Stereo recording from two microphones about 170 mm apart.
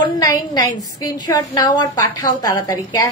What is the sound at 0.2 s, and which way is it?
A woman's voice, 20° left (ahead or behind).